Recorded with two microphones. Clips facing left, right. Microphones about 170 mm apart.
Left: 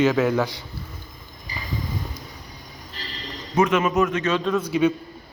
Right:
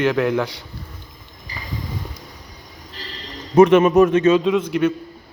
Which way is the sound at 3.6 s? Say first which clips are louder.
Right 8 dB; 35° right (ahead or behind).